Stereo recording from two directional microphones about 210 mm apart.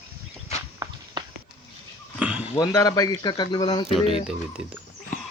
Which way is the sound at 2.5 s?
15° left (ahead or behind).